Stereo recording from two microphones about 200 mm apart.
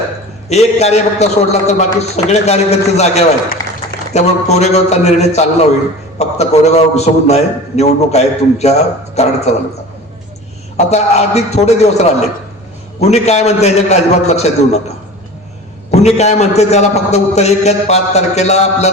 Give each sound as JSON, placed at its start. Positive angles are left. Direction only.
{"t": 0.5, "sound": "a man's voice", "side_deg": 35}
{"t": 3.6, "sound": "a sound", "side_deg": 20}
{"t": 4.1, "sound": "a man's voice", "side_deg": 35}
{"t": 10.9, "sound": "a man's voice", "side_deg": 35}
{"t": 15.9, "sound": "a man's voice", "side_deg": 35}